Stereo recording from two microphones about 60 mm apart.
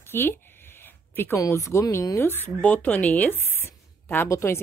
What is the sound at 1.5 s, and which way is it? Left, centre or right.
Speech, left.